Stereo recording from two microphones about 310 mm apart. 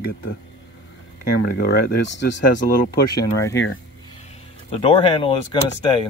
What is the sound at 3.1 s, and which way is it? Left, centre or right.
Speech, centre.